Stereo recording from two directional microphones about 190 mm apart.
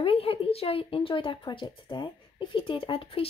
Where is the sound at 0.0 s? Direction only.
30° left (ahead or behind).